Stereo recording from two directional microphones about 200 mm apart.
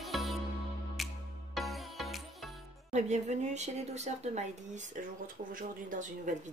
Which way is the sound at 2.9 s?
35° right (ahead or behind).